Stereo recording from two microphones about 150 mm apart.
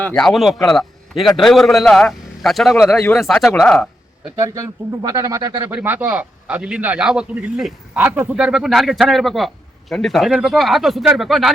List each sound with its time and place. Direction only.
0.0 s speech: 5° left (ahead or behind)
4.4 s speech: 20° right (ahead or behind); by 11.5 s centre (ahead or behind)